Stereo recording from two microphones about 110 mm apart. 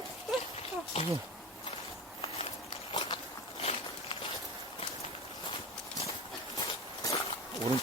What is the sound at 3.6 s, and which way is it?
Walk, 60° left (ahead or behind).